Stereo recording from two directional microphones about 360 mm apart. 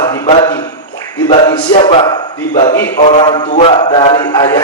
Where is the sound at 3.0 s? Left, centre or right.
Centre.